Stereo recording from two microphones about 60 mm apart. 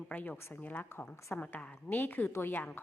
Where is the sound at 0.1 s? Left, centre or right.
Left.